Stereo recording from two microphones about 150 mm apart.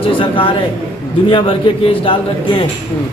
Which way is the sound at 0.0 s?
35° left (ahead or behind).